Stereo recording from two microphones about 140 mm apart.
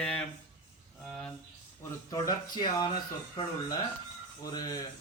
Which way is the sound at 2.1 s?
30° left (ahead or behind).